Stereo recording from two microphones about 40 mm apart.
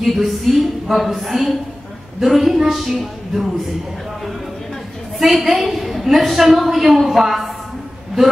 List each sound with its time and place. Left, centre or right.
0.0 s a woman's voice: centre
5.2 s a woman's voice: centre